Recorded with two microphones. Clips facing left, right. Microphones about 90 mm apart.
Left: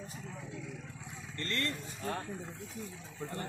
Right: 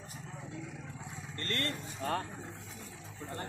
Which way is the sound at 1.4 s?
50° right (ahead or behind).